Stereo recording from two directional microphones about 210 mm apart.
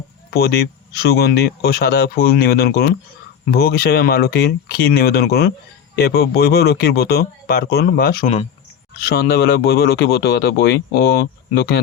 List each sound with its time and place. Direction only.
0.3 s speech: 50° left (ahead or behind)